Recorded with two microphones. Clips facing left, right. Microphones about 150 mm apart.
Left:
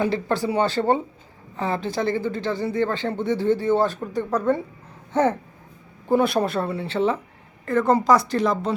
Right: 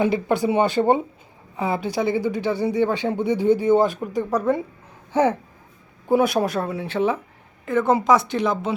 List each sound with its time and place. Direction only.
0.0 s speech: 15° right (ahead or behind)